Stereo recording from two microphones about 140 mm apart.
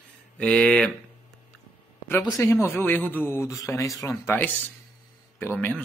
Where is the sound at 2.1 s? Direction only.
25° left (ahead or behind).